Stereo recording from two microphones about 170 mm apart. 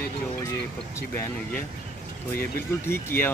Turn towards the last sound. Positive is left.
turn(degrees=15)  # may be behind; listen again after turning